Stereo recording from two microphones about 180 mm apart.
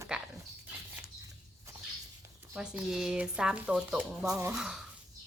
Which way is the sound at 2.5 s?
5° right (ahead or behind).